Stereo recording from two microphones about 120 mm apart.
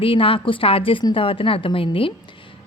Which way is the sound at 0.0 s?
50° left (ahead or behind).